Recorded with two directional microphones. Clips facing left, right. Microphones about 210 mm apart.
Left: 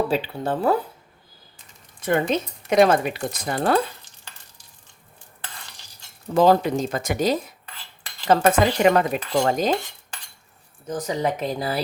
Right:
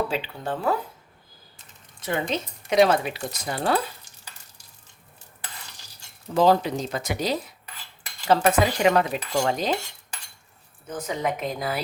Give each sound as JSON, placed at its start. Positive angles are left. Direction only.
{"t": 0.1, "sound": "a woman's voice", "side_deg": 40}
{"t": 2.0, "sound": "speech", "side_deg": 50}
{"t": 6.3, "sound": "speech", "side_deg": 50}
{"t": 10.8, "sound": "a woman's voice", "side_deg": 35}